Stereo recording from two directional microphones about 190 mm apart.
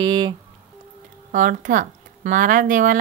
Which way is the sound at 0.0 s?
25° right (ahead or behind).